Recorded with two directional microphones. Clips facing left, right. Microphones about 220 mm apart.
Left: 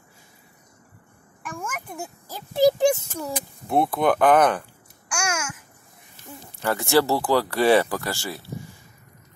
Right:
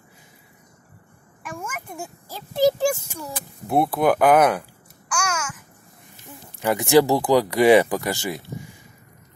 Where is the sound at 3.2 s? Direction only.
Centre (ahead or behind).